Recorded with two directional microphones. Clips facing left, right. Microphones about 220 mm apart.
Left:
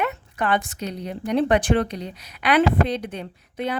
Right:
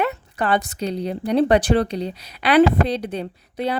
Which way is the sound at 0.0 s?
35° right (ahead or behind).